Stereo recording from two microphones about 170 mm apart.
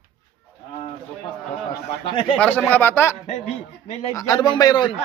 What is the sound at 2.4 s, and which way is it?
Speech, 10° left (ahead or behind).